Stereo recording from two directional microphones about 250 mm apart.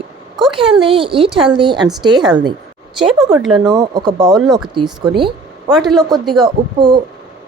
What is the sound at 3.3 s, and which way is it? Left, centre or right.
Speech, centre.